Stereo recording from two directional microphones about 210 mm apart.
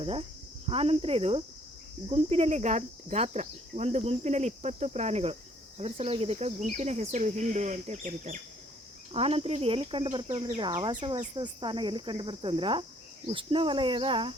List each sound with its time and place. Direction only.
0.0 s cricket: 25° right (ahead or behind)
10.4 s insect: 15° right (ahead or behind)
10.8 s cricket: 25° right (ahead or behind)